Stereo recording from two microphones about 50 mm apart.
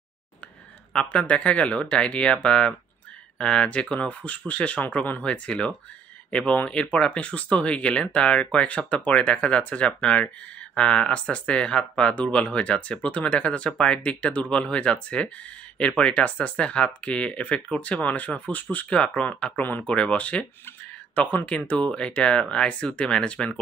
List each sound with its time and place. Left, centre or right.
0.9 s speech: left
5.2 s speech: left
8.6 s speech: left